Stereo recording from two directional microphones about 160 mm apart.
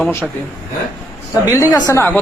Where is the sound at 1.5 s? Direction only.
20° left (ahead or behind).